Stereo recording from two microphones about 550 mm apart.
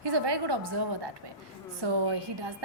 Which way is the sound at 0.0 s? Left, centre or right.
Right.